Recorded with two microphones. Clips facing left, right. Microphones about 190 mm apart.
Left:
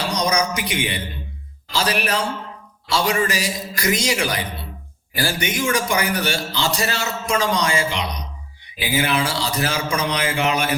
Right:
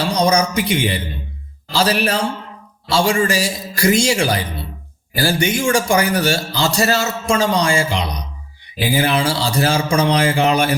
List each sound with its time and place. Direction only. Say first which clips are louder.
0.1 s a man's voice: right 5 dB; 30° right (ahead or behind)